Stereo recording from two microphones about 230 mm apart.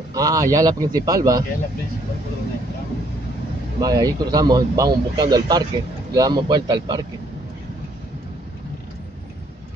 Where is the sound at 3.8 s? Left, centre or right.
Centre.